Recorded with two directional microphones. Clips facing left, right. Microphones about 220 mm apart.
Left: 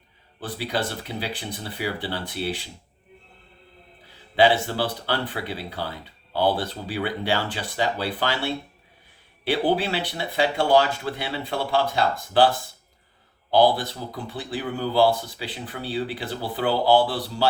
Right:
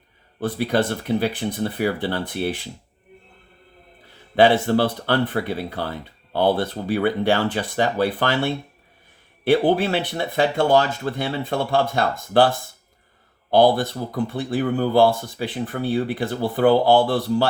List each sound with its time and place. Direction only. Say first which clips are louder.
0.3 s speech: right 7 dB; 50° right (ahead or behind)
4.4 s speech: right 4 dB; 50° right (ahead or behind)
9.4 s speech: right 5 dB; 50° right (ahead or behind)
13.5 s speech: right 3 dB; 50° right (ahead or behind)